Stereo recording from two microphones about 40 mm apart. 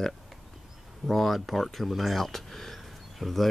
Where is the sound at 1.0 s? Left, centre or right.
Centre.